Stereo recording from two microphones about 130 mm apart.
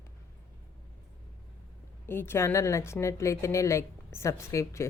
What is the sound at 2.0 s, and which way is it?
Speech, 15° left (ahead or behind).